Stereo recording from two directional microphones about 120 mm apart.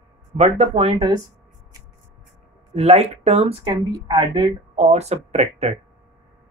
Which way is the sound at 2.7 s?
60° right (ahead or behind).